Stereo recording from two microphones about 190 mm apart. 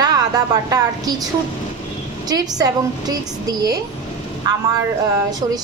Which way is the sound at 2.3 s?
20° right (ahead or behind).